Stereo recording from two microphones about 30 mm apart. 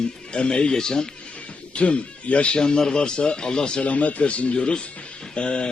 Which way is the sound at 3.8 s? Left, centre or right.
Left.